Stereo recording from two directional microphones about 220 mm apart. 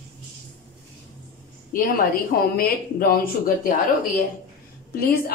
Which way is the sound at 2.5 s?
45° left (ahead or behind).